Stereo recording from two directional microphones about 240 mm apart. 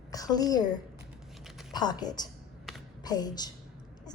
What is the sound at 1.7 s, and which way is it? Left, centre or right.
A woman's voice, centre.